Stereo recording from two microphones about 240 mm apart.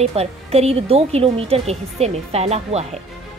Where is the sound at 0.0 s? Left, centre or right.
Right.